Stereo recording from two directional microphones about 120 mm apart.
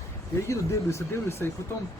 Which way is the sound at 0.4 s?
25° left (ahead or behind).